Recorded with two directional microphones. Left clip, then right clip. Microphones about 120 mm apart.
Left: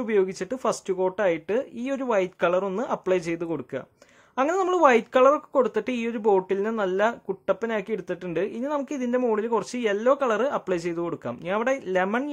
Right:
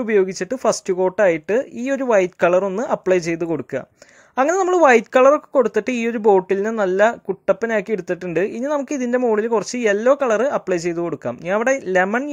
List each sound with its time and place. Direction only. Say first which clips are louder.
0.0 s a woman's voice: right 6 dB; 30° right (ahead or behind)